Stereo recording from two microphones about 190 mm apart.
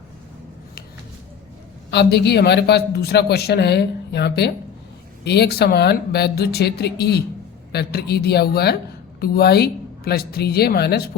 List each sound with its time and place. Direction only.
1.9 s a man's voice: 60° left (ahead or behind)